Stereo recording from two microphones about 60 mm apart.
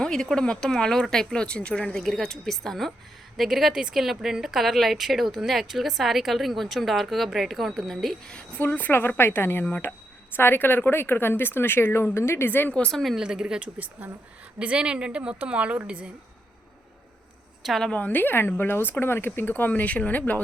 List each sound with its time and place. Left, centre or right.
0.0 s speech: centre
2.0 s speech: centre
8.3 s speech: left
8.6 s speech: left
12.7 s speech: centre
13.1 s speech: centre
17.9 s speech: left